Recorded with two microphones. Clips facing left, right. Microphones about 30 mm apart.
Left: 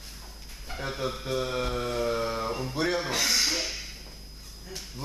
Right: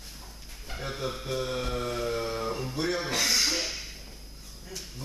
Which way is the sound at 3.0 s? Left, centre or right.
Centre.